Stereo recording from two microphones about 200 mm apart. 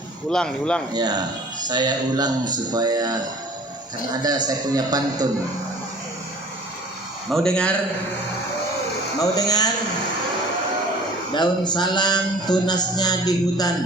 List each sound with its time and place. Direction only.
0.3 s speech: 5° left (ahead or behind)
0.9 s speech: 20° right (ahead or behind)
4.2 s speech: 20° right (ahead or behind)
7.3 s speech: centre (ahead or behind)
9.3 s speech: 20° left (ahead or behind)
11.3 s speech: 20° left (ahead or behind)